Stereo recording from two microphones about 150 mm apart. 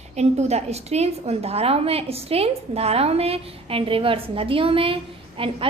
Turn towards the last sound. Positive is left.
turn(degrees=-35)  # may be behind; listen again after turning